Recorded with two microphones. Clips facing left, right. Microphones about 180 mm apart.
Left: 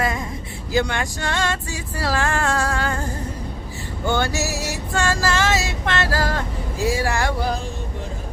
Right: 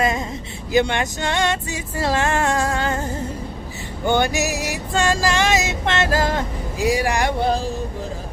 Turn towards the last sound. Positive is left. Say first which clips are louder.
# right 3 dB
turn(degrees=-30)  # may be behind; listen again after turning